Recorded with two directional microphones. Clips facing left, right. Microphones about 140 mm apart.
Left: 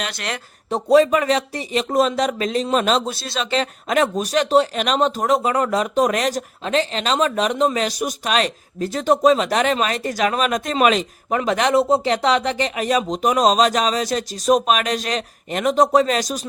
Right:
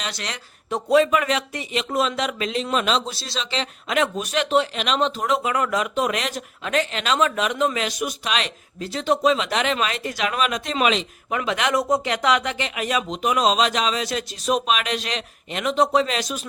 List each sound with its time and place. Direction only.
0.0 s speech: 55° left (ahead or behind)
0.7 s speech: 35° left (ahead or behind)